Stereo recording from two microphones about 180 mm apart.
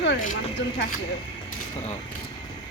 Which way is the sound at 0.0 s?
75° left (ahead or behind).